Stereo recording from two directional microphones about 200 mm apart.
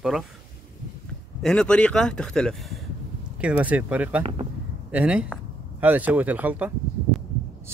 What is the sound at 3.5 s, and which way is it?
Speech, 5° right (ahead or behind).